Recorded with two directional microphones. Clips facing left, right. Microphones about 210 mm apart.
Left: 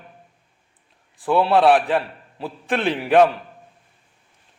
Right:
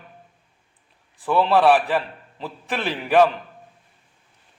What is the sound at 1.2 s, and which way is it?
A man's voice, 15° left (ahead or behind).